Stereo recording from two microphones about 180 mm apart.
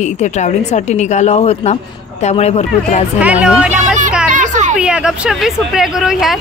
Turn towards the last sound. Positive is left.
turn(degrees=0)  # may be behind; listen again after turning